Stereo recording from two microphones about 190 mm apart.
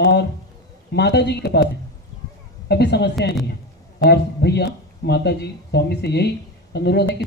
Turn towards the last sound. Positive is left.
turn(degrees=60)  # may be behind; listen again after turning